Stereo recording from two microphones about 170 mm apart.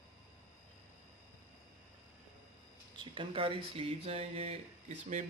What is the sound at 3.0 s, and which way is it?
Speech, 30° right (ahead or behind).